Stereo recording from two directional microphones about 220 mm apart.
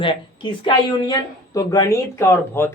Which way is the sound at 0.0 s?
20° left (ahead or behind).